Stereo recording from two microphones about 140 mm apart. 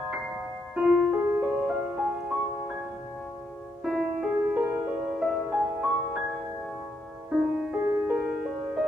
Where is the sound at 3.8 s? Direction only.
Centre (ahead or behind).